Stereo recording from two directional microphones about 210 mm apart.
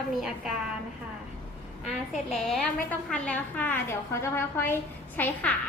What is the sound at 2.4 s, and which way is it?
A woman's voice, centre (ahead or behind).